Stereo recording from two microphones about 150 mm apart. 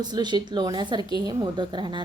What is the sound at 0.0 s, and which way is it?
A woman's voice, 30° right (ahead or behind).